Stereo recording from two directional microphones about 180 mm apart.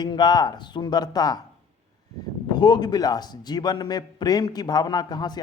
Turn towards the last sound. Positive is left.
turn(degrees=25)  # may be behind; listen again after turning